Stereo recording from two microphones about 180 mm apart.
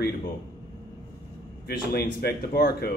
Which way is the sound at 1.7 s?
55° left (ahead or behind).